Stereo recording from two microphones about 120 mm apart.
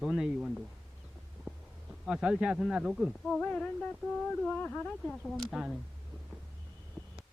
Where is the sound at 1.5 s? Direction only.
20° right (ahead or behind).